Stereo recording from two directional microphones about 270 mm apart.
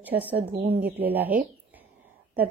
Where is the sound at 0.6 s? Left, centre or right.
Right.